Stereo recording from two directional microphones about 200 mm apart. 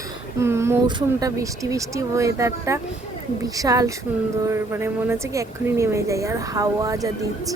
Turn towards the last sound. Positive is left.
turn(degrees=-15)  # may be behind; listen again after turning